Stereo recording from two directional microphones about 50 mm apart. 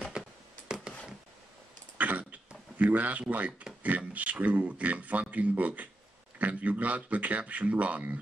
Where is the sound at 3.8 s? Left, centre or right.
Right.